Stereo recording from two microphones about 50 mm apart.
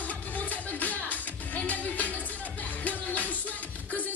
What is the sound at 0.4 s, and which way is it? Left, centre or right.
Music, left.